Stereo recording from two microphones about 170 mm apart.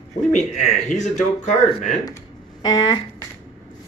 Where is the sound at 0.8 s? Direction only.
45° left (ahead or behind).